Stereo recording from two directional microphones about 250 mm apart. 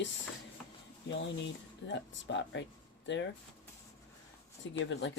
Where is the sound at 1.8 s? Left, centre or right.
Left.